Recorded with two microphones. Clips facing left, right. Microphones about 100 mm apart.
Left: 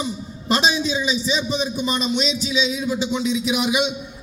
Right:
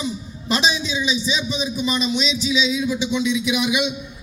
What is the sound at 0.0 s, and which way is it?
A man's voice, 45° left (ahead or behind).